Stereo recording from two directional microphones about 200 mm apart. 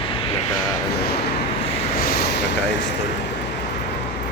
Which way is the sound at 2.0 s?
50° left (ahead or behind).